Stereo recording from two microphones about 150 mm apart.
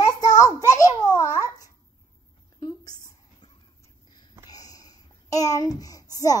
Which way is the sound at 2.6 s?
25° left (ahead or behind).